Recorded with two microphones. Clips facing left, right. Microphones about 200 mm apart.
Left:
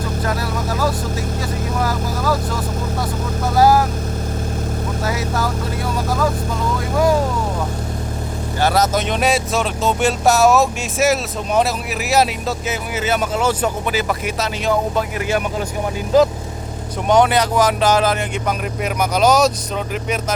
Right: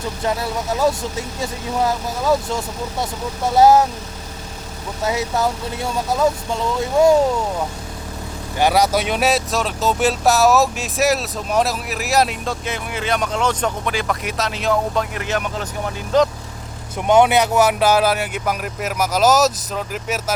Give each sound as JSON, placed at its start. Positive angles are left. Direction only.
{"t": 0.3, "sound": "speech", "side_deg": -25}
{"t": 5.0, "sound": "speech", "side_deg": -20}
{"t": 8.6, "sound": "speech", "side_deg": -10}
{"t": 17.1, "sound": "speech", "side_deg": -10}